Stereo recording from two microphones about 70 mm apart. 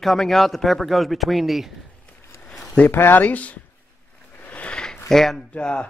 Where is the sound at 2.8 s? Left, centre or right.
Left.